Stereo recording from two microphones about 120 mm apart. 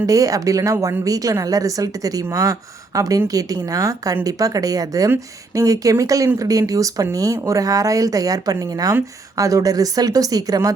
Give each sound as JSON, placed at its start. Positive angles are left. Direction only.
{"t": 0.0, "sound": "a woman's voice", "side_deg": -30}